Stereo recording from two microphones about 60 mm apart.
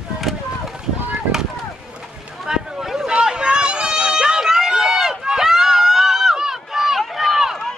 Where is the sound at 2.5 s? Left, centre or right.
Centre.